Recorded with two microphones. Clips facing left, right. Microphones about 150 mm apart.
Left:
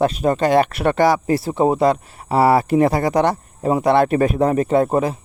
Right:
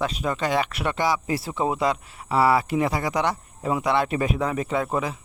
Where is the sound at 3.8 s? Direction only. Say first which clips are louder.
Left 9 dB; 50° left (ahead or behind).